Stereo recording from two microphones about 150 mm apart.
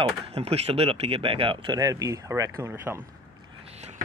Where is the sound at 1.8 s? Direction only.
20° right (ahead or behind).